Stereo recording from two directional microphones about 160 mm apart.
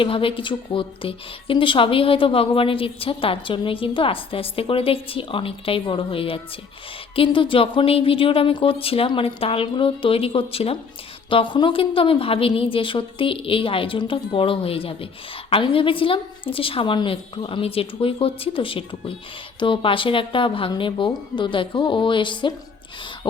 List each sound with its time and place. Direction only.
0.0 s a woman's voice: 35° left (ahead or behind)